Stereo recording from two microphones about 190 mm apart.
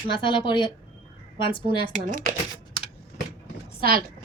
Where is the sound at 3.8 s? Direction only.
50° right (ahead or behind).